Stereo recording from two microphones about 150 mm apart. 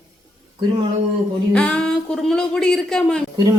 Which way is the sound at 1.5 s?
5° left (ahead or behind).